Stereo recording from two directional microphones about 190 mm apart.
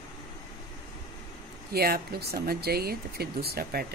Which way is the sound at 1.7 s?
55° right (ahead or behind).